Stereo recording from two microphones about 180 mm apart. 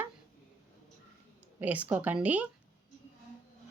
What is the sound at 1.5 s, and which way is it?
Speech, 10° right (ahead or behind).